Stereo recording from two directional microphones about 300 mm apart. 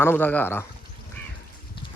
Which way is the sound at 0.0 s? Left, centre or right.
Centre.